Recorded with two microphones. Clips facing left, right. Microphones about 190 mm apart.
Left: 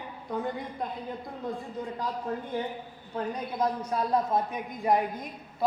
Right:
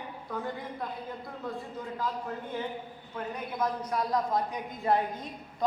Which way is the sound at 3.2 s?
35° left (ahead or behind).